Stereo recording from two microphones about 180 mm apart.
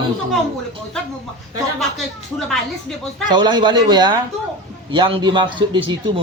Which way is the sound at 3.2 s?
25° right (ahead or behind).